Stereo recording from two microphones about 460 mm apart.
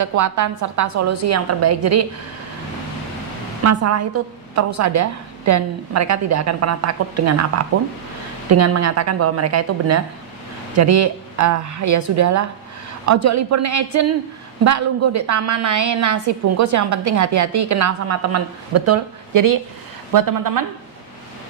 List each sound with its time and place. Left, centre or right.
0.0 s a woman's voice: right
3.6 s a woman's voice: right